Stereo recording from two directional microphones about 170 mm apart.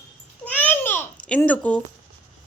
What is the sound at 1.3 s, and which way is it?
Speech, 10° left (ahead or behind).